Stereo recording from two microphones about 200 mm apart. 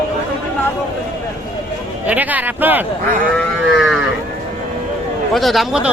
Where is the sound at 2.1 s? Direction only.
10° right (ahead or behind).